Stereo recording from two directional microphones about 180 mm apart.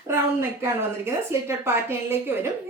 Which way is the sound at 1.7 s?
15° right (ahead or behind).